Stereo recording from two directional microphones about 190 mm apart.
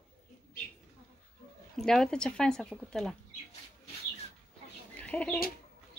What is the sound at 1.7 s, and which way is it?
Speech, 5° left (ahead or behind).